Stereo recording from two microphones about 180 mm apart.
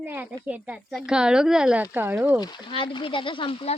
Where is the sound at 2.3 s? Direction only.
25° left (ahead or behind).